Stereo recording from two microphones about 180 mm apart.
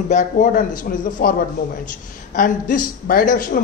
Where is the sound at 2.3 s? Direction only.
45° left (ahead or behind).